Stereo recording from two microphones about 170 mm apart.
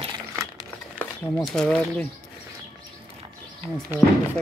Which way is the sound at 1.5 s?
5° left (ahead or behind).